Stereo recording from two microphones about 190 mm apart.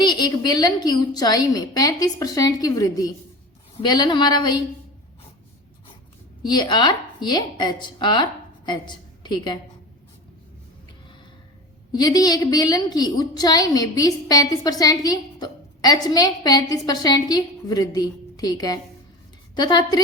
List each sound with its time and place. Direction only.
0.0 s a woman's voice: 20° left (ahead or behind)
6.5 s a woman's voice: 25° left (ahead or behind)
11.9 s a woman's voice: 20° left (ahead or behind)